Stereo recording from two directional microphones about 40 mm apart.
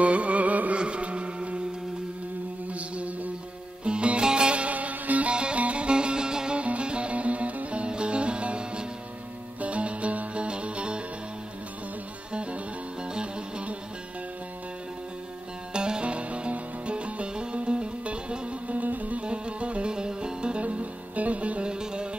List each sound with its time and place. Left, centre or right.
0.0 s music: right
0.7 s music: right
2.7 s mantra: right
3.8 s music: right
5.3 s music: right
12.3 s music: right
15.7 s music: right
18.7 s music: right
19.2 s music: right
20.6 s music: right